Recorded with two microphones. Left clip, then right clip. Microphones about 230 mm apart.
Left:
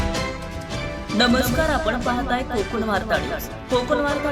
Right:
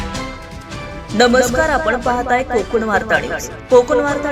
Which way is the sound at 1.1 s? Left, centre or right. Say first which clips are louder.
Right 7 dB; right.